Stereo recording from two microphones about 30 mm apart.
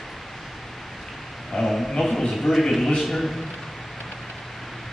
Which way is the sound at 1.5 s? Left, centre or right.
Centre.